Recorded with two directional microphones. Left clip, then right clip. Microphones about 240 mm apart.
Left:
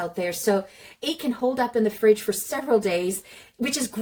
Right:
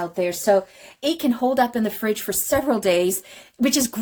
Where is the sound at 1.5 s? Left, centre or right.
Right.